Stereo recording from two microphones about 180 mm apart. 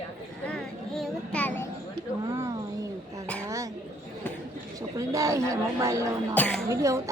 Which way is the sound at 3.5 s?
20° right (ahead or behind).